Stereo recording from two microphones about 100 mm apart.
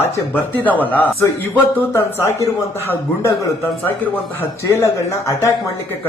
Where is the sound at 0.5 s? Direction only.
15° left (ahead or behind).